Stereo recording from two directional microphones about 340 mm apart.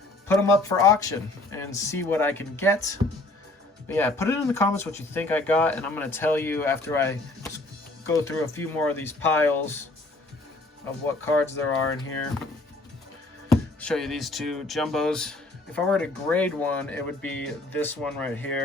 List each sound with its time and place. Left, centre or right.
0.3 s speech: centre
11.3 s speech: centre
13.5 s speech: centre